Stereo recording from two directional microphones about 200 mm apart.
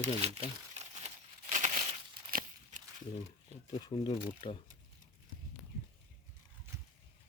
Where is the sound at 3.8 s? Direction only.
20° left (ahead or behind).